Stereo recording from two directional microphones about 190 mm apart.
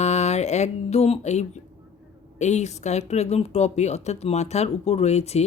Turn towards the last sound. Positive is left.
turn(degrees=35)  # may be behind; listen again after turning